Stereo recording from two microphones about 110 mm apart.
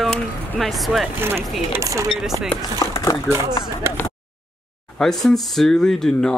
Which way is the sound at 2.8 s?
30° left (ahead or behind).